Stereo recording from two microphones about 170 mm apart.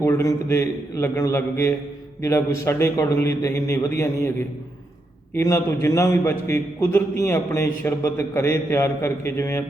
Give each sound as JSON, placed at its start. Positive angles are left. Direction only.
{"t": 0.0, "sound": "a man's voice", "side_deg": 15}
{"t": 5.3, "sound": "a man's voice", "side_deg": 15}